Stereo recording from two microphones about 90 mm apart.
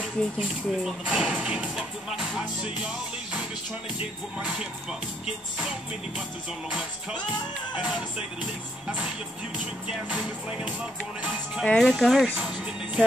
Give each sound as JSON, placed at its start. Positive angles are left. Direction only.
{"t": 0.4, "sound": "speech", "side_deg": -5}
{"t": 4.4, "sound": "speech", "side_deg": -10}
{"t": 6.7, "sound": "speech", "side_deg": -10}
{"t": 9.8, "sound": "speech", "side_deg": -15}
{"t": 11.6, "sound": "speech", "side_deg": 5}
{"t": 12.4, "sound": "speech", "side_deg": -15}